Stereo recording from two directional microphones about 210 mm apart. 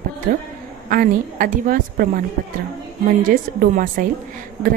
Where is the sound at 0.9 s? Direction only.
40° right (ahead or behind).